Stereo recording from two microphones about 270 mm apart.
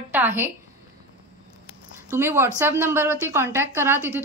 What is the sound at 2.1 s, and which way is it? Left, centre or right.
A woman's voice, centre.